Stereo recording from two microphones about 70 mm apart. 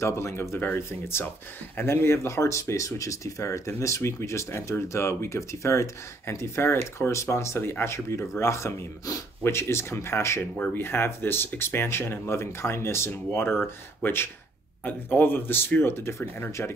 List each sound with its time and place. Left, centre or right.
0.0 s speech: left